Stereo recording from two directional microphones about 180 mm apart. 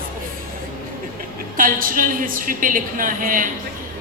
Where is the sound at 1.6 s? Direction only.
50° right (ahead or behind).